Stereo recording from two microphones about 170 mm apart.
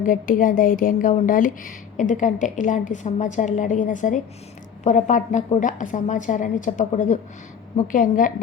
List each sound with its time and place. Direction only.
0.0 s speech: 55° left (ahead or behind)